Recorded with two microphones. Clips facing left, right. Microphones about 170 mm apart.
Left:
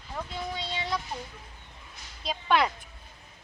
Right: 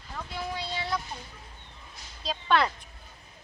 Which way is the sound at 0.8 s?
20° left (ahead or behind).